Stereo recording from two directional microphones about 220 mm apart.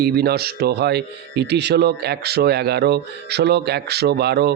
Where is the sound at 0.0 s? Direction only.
45° right (ahead or behind).